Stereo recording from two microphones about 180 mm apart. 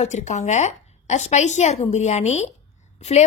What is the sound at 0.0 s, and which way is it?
A woman's voice, 40° left (ahead or behind).